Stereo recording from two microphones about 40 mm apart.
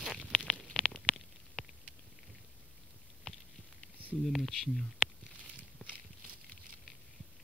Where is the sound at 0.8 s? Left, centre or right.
Left.